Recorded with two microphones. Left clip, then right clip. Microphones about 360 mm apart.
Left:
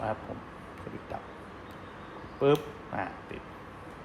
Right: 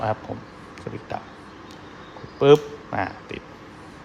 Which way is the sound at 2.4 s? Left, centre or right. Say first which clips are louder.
Right 10 dB; right.